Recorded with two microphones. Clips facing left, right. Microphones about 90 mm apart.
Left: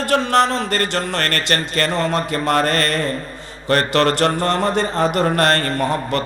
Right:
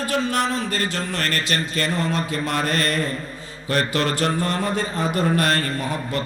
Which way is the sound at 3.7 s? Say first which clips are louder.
Left 6 dB; 55° left (ahead or behind).